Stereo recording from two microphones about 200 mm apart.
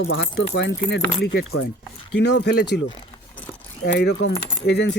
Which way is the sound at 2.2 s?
60° left (ahead or behind).